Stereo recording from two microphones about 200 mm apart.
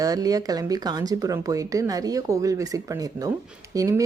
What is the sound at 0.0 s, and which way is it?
A woman's voice, 20° right (ahead or behind).